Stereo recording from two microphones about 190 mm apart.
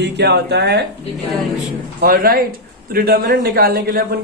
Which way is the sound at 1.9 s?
50° right (ahead or behind).